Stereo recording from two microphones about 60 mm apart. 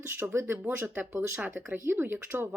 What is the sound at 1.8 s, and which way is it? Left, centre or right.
Speech, right.